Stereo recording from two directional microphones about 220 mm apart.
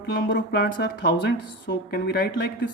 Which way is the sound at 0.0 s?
50° left (ahead or behind).